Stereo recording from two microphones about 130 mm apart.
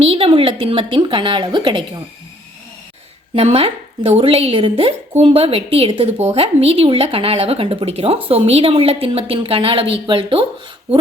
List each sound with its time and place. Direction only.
0.0 s speech: 45° right (ahead or behind)
3.3 s a woman's voice: 50° right (ahead or behind)
10.9 s speech: 50° right (ahead or behind)